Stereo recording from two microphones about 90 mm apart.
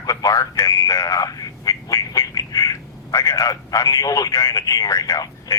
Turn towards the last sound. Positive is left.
turn(degrees=45)  # may be behind; listen again after turning